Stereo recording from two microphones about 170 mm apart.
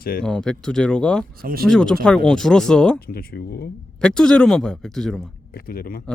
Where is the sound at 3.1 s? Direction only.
65° left (ahead or behind).